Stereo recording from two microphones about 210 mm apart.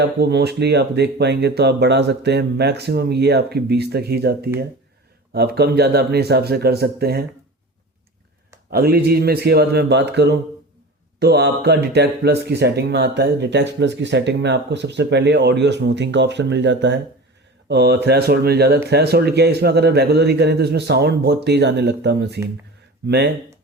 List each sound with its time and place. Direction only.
0.0 s speech: 50° right (ahead or behind)
8.7 s speech: 50° right (ahead or behind)